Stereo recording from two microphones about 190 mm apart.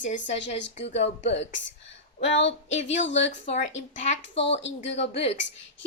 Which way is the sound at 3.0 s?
75° left (ahead or behind).